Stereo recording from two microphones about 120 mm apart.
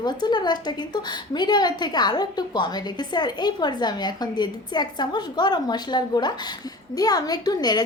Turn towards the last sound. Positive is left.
turn(degrees=35)  # may be behind; listen again after turning